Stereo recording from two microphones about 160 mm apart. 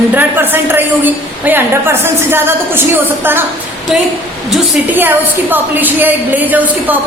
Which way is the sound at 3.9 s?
5° right (ahead or behind).